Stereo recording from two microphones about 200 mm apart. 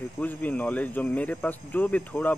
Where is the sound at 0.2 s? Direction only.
5° left (ahead or behind).